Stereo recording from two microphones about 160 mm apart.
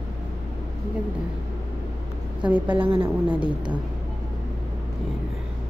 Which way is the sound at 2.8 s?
35° right (ahead or behind).